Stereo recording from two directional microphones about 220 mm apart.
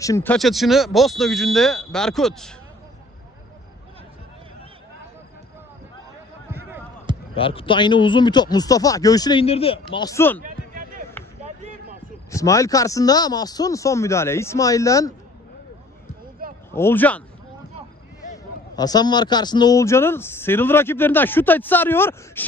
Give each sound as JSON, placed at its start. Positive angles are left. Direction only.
{"t": 0.0, "sound": "speech", "side_deg": 10}
{"t": 7.3, "sound": "speech", "side_deg": 25}
{"t": 10.4, "sound": "a sound", "side_deg": -40}
{"t": 12.3, "sound": "speech", "side_deg": 15}
{"t": 16.4, "sound": "a sound", "side_deg": -40}
{"t": 16.7, "sound": "speech", "side_deg": 10}
{"t": 18.8, "sound": "speech", "side_deg": 20}